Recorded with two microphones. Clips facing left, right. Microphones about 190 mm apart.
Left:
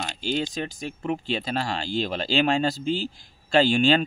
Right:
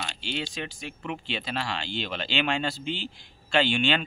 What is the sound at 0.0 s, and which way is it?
Speech, 40° left (ahead or behind).